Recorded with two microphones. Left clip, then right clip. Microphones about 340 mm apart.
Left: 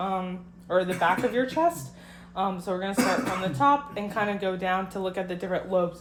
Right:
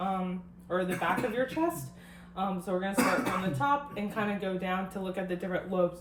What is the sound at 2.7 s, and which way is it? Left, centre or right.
Speech, left.